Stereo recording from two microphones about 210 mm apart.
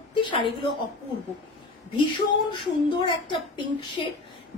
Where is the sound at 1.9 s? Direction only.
20° left (ahead or behind).